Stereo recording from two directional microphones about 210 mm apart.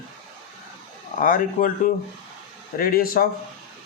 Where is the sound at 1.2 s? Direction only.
40° left (ahead or behind).